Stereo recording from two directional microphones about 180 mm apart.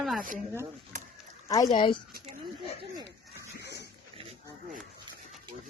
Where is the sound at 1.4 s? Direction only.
20° left (ahead or behind).